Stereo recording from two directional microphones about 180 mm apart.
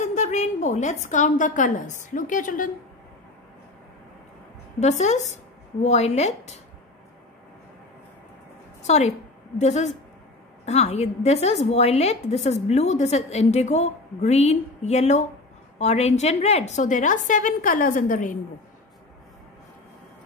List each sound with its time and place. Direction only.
0.0 s a woman's voice: 40° left (ahead or behind)
4.7 s speech: 40° left (ahead or behind)
8.8 s a woman's voice: 35° left (ahead or behind)